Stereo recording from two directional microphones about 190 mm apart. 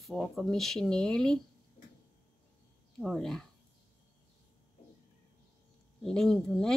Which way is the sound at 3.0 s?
Centre (ahead or behind).